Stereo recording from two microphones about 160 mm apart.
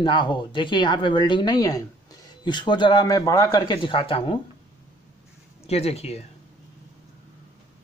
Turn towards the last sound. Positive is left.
turn(degrees=40)  # may be behind; listen again after turning